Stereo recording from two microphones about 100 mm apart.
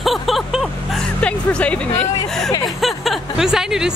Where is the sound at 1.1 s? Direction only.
10° left (ahead or behind).